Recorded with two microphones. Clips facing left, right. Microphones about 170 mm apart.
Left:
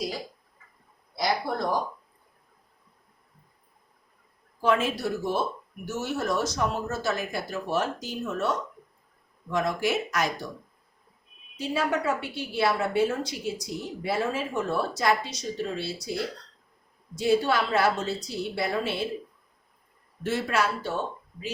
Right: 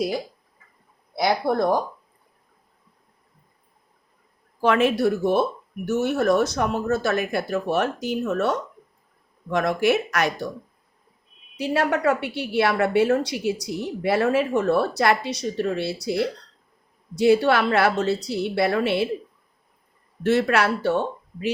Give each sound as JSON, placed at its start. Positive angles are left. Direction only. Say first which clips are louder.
{"t": 1.1, "sound": "speech", "louder": "right 6 dB", "side_deg": -60}
{"t": 4.6, "sound": "speech", "louder": "right 6 dB", "side_deg": -70}
{"t": 11.5, "sound": "a woman's voice", "louder": "right 5 dB", "side_deg": -70}
{"t": 20.2, "sound": "a woman's voice", "louder": "right 7 dB", "side_deg": -70}